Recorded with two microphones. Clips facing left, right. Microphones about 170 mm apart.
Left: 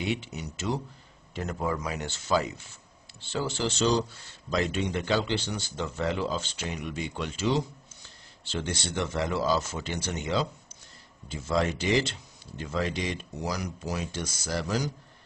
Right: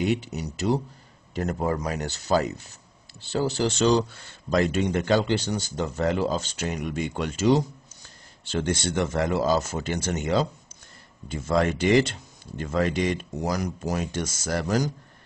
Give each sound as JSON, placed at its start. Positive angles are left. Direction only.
{"t": 0.0, "sound": "speech", "side_deg": -40}
{"t": 3.7, "sound": "speech", "side_deg": -60}